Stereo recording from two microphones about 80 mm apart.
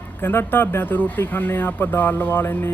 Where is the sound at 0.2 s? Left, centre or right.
Left.